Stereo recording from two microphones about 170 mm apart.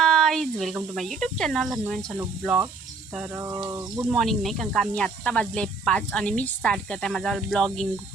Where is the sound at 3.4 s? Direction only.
15° right (ahead or behind).